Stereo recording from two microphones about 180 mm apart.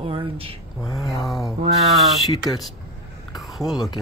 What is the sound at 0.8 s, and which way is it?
Speech, 20° left (ahead or behind).